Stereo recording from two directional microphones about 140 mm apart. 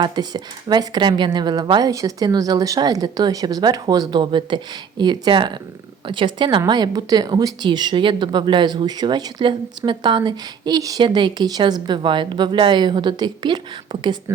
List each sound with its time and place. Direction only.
0.0 s a woman's voice: 30° right (ahead or behind)